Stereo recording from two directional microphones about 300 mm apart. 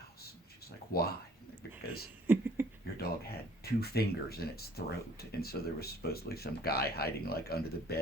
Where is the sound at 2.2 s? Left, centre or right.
Centre.